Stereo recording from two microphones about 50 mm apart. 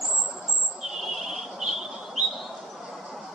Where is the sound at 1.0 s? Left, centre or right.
Centre.